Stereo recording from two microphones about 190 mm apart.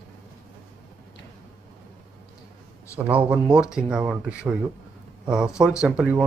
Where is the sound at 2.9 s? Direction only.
10° right (ahead or behind).